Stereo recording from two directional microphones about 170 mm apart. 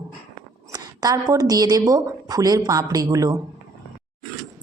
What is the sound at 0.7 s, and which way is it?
A woman's voice, 20° right (ahead or behind).